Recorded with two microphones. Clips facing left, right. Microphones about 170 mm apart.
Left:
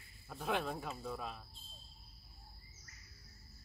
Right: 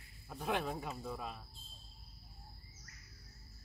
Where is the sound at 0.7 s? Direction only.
15° right (ahead or behind).